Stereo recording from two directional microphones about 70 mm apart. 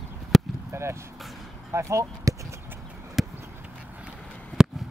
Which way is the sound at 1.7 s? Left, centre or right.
Right.